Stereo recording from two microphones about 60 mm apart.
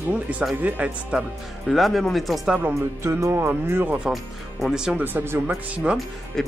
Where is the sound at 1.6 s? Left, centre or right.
Centre.